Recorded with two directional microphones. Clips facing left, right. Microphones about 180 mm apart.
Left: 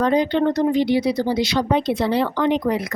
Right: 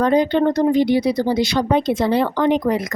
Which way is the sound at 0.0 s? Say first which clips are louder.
Right 2 dB; 50° right (ahead or behind).